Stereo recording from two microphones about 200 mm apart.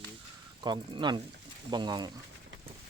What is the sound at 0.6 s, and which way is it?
Speech, 20° right (ahead or behind).